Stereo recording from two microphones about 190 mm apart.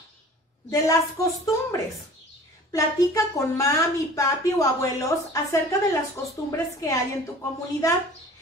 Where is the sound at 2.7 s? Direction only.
15° left (ahead or behind).